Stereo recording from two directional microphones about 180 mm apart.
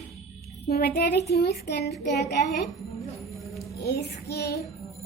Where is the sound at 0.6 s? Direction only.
60° left (ahead or behind).